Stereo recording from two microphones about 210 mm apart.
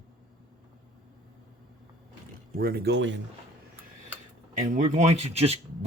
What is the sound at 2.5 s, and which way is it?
Speech, 45° right (ahead or behind).